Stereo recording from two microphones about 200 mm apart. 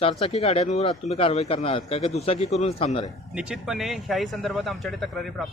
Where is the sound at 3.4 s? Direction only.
5° right (ahead or behind).